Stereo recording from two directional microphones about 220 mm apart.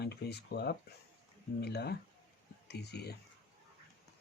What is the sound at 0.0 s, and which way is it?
Speech, 50° left (ahead or behind).